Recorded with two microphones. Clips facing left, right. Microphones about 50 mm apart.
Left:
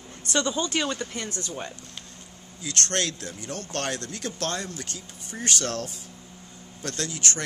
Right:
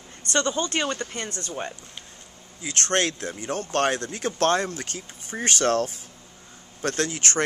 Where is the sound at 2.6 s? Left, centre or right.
Right.